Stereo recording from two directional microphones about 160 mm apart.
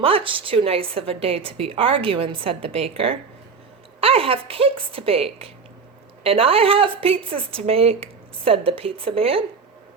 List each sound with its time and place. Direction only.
0.0 s a woman's voice: 35° right (ahead or behind)